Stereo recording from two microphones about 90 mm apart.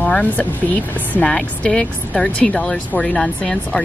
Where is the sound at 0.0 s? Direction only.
15° left (ahead or behind).